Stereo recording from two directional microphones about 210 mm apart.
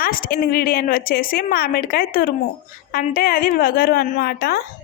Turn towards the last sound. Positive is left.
turn(degrees=45)  # may be behind; listen again after turning